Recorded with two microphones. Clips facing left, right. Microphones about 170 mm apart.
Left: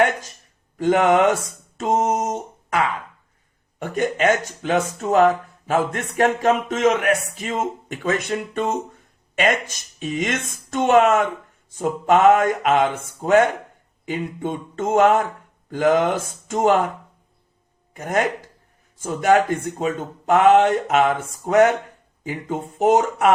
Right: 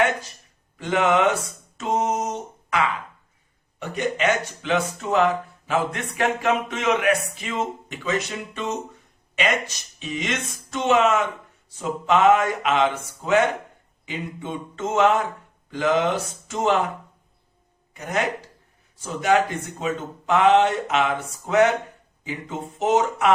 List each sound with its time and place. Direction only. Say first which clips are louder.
0.0 s a sound: left 3 dB; 45° left (ahead or behind)
0.8 s speech: left 4 dB; 45° left (ahead or behind)
17.9 s speech: left 4 dB; 50° left (ahead or behind)